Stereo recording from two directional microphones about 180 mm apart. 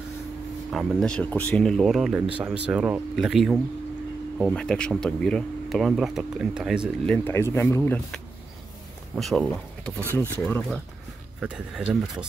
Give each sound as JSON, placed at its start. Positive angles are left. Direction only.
{"t": 0.7, "sound": "speech", "side_deg": 0}
{"t": 7.1, "sound": "speech", "side_deg": 15}
{"t": 11.3, "sound": "speech", "side_deg": -5}